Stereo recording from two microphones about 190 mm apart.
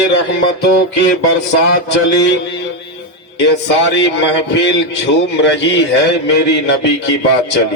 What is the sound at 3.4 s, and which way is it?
Music, 70° left (ahead or behind).